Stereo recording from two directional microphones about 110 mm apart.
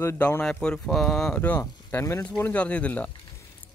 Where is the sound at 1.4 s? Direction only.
15° left (ahead or behind).